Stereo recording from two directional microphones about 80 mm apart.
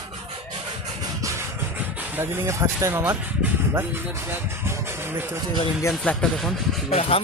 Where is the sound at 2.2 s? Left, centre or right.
Right.